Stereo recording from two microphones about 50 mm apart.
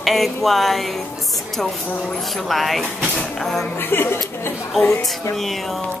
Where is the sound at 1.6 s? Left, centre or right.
Centre.